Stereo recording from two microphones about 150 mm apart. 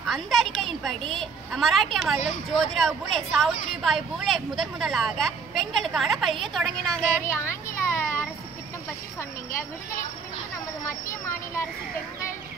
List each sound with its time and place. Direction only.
0.0 s a woman's voice: centre (ahead or behind)
7.3 s a sound: 15° left (ahead or behind)
10.9 s speech: 20° left (ahead or behind)